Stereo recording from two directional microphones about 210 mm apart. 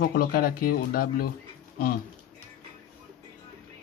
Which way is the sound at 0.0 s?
45° left (ahead or behind).